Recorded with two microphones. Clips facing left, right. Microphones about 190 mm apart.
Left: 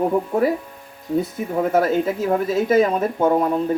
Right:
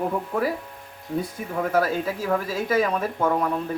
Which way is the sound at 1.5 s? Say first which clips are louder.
Left 5 dB; 25° left (ahead or behind).